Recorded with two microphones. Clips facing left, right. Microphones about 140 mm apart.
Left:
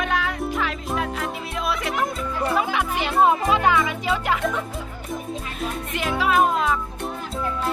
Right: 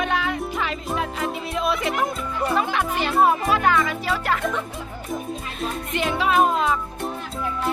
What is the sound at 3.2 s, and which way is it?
Speech, 20° left (ahead or behind).